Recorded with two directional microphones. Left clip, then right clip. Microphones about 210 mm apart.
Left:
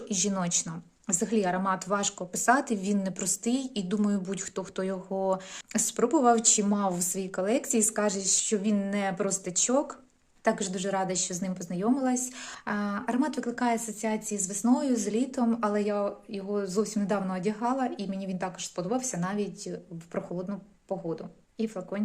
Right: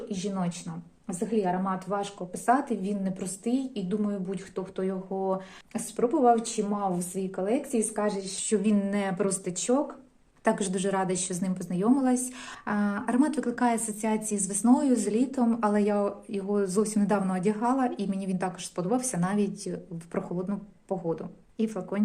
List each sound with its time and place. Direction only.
0.1 s a woman's voice: 30° left (ahead or behind)
8.4 s a woman's voice: 10° left (ahead or behind)